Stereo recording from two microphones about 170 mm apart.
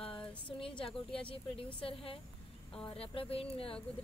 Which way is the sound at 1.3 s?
35° left (ahead or behind).